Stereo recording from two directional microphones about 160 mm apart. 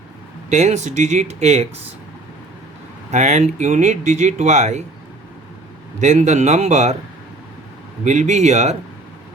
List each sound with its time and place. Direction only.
0.5 s speech: 45° right (ahead or behind)
3.1 s speech: 45° right (ahead or behind)
6.0 s speech: 50° right (ahead or behind)
8.0 s speech: 50° right (ahead or behind)